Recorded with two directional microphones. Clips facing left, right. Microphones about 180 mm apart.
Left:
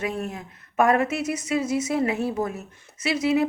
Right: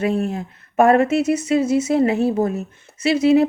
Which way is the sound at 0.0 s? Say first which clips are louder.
Right 8 dB; 30° right (ahead or behind).